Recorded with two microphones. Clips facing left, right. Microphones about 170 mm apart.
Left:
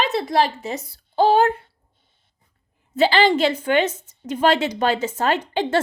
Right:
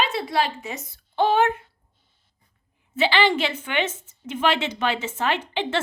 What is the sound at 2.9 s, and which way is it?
A woman's voice, 40° left (ahead or behind).